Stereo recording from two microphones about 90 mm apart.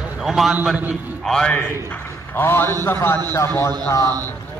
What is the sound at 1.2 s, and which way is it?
A man's voice, 5° left (ahead or behind).